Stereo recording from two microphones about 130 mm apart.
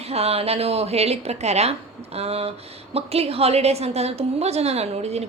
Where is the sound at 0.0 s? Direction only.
50° right (ahead or behind).